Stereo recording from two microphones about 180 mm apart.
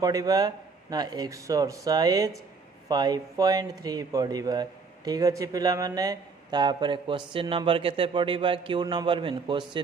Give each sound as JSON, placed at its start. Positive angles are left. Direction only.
{"t": 0.0, "sound": "a man's voice", "side_deg": -20}